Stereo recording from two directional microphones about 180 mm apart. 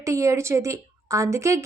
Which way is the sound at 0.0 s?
15° right (ahead or behind).